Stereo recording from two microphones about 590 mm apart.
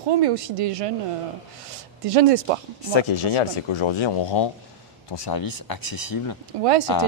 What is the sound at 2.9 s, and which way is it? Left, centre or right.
Speech, left.